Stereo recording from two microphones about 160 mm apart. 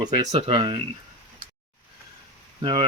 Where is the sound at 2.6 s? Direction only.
30° right (ahead or behind).